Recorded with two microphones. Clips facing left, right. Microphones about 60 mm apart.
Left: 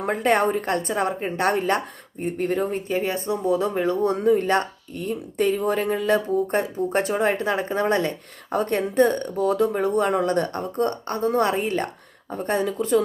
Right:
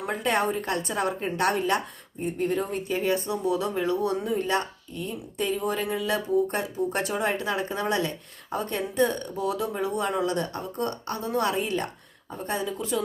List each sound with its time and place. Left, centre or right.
0.0 s speech: left